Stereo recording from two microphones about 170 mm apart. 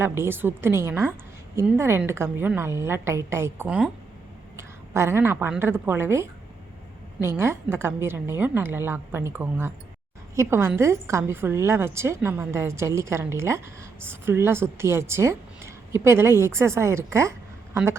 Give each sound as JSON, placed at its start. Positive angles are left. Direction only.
{"t": 0.0, "sound": "a woman's voice", "side_deg": -15}